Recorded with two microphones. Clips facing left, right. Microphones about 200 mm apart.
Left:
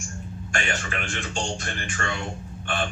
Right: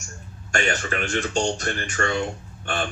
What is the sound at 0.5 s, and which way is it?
Speech, 40° right (ahead or behind).